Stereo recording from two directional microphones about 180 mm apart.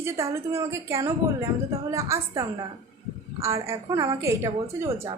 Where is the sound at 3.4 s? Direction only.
15° right (ahead or behind).